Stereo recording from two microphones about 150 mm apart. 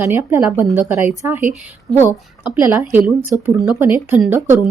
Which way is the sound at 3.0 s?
10° right (ahead or behind).